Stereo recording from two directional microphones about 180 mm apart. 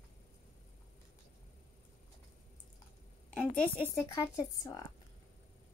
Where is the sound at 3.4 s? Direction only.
5° left (ahead or behind).